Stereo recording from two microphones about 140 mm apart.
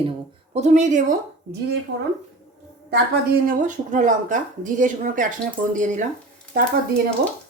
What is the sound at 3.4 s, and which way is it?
A woman's voice, 65° right (ahead or behind).